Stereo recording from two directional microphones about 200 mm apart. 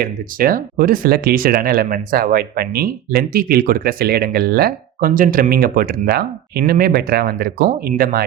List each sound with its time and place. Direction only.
0.0 s speech: 45° right (ahead or behind)